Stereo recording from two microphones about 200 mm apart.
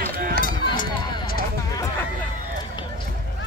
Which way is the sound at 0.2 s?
45° right (ahead or behind).